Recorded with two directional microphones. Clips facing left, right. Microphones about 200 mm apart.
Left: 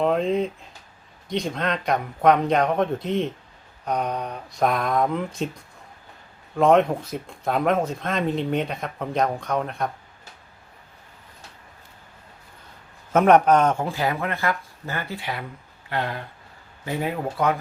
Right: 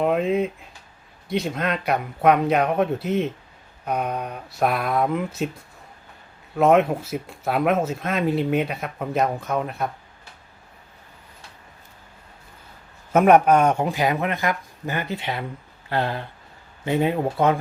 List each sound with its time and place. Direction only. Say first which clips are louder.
0.0 s speech: right 1 dB; 5° right (ahead or behind)
6.6 s speech: even; 5° right (ahead or behind)
13.1 s speech: right 1 dB; 10° right (ahead or behind)
15.9 s a sound: right 3 dB; 30° right (ahead or behind)
16.8 s speech: right 5 dB; 25° right (ahead or behind)